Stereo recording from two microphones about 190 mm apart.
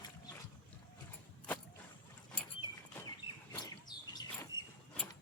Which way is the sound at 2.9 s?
20° left (ahead or behind).